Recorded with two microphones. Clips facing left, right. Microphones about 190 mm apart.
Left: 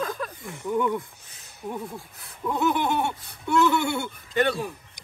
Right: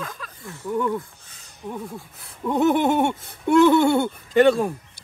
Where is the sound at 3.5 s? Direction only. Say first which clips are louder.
Right 7 dB; 55° right (ahead or behind).